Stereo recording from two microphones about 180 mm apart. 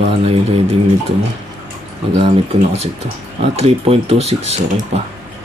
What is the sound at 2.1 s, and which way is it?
Speech, 35° right (ahead or behind).